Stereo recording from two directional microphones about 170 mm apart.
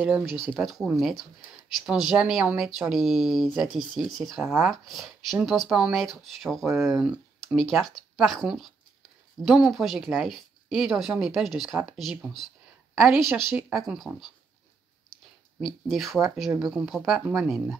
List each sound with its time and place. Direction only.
0.0 s speech: 10° right (ahead or behind)
6.6 s speech: 15° right (ahead or behind)
6.9 s speech: centre (ahead or behind)
15.6 s speech: centre (ahead or behind)